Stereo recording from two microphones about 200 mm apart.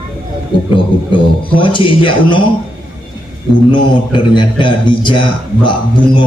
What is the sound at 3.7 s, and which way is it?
Speech, 25° left (ahead or behind).